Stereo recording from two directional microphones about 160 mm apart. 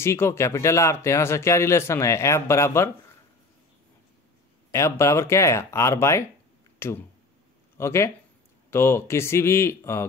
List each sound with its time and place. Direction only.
0.0 s speech: 15° left (ahead or behind)
4.6 s speech: 20° left (ahead or behind)